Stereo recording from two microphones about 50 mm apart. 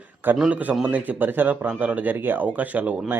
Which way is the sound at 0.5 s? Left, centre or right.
Right.